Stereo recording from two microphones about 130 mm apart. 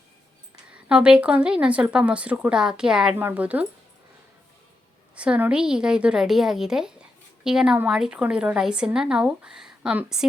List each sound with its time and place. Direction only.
0.7 s speech: 10° right (ahead or behind)
5.1 s a woman's voice: 10° right (ahead or behind)